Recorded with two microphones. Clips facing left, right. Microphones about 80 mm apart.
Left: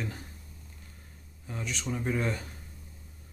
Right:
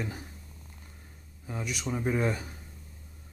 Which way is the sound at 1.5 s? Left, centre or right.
Centre.